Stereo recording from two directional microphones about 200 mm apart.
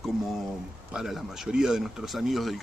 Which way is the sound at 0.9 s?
Centre (ahead or behind).